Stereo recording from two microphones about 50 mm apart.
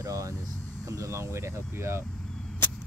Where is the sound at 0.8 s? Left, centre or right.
Right.